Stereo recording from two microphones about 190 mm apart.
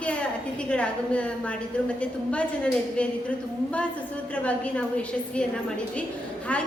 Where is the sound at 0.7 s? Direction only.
5° left (ahead or behind).